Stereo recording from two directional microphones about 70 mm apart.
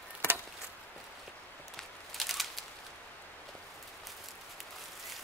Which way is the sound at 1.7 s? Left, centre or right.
Centre.